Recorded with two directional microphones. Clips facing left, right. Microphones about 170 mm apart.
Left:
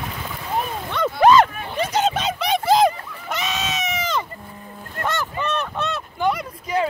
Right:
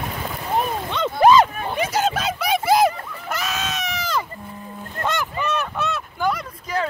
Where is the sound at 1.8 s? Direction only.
5° right (ahead or behind).